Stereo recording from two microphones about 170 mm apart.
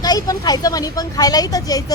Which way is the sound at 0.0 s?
25° left (ahead or behind).